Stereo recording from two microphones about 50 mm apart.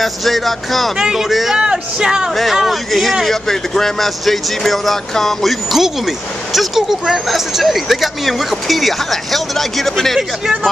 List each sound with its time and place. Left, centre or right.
0.0 s speech: centre
0.9 s speech: centre
1.6 s speech: centre
2.3 s speech: centre